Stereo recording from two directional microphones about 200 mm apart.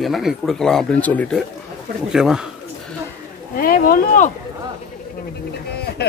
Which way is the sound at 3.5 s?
45° left (ahead or behind).